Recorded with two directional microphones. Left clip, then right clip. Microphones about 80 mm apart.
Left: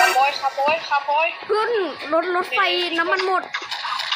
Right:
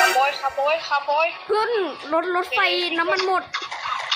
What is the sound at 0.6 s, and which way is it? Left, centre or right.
Speech, right.